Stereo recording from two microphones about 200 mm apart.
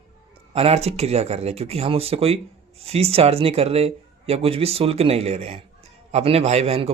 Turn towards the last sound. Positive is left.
turn(degrees=-30)  # may be behind; listen again after turning